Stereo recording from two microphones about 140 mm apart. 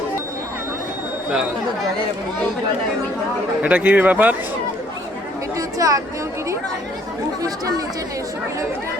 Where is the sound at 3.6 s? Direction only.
10° right (ahead or behind).